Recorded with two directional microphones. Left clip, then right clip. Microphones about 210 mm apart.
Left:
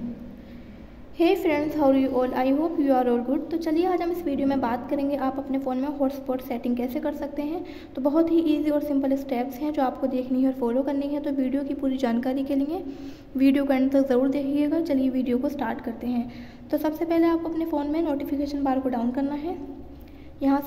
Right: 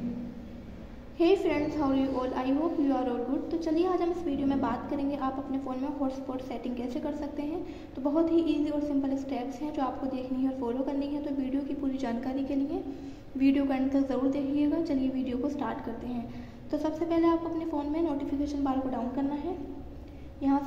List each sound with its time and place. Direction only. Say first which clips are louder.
1.1 s a woman's voice: left 3 dB; 50° left (ahead or behind)